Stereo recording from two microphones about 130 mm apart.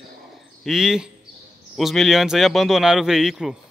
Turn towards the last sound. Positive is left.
turn(degrees=-5)  # may be behind; listen again after turning